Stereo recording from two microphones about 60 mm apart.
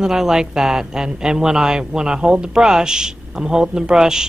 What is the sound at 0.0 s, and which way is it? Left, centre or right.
Speech, centre.